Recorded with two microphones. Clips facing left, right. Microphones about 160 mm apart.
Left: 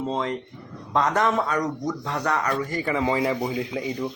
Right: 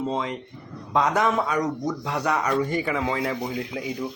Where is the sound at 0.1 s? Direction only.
5° right (ahead or behind).